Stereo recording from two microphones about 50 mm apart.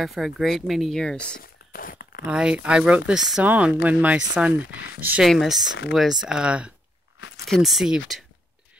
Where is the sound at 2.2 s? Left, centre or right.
Right.